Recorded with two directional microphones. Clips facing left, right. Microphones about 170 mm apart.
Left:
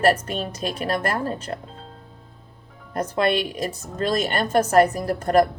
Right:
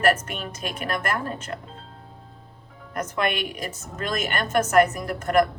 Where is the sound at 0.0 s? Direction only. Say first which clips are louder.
Left 2 dB; 30° left (ahead or behind).